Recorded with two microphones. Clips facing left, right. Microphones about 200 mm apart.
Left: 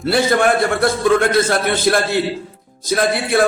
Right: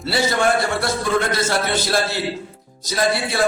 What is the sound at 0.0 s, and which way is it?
A man's voice, 55° left (ahead or behind).